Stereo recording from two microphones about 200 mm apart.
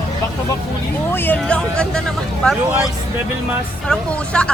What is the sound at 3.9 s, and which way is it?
Speech, 5° left (ahead or behind).